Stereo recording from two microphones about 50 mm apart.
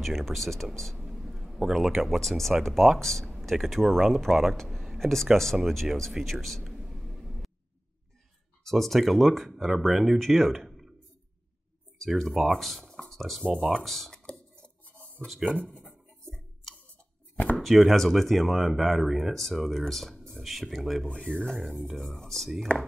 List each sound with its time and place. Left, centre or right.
0.0 s speech: centre
6.6 s a sound: centre
8.6 s speech: centre
12.2 s speech: centre
14.1 s cutlery: centre
15.0 s a sound: left
15.2 s speech: centre
15.5 s a sound: centre
17.6 s speech: centre
21.1 s speech: centre
21.6 s speech: centre
22.7 s speech: left